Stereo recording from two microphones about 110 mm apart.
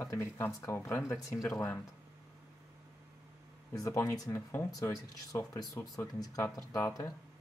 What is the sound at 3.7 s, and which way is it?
Speech, 25° left (ahead or behind).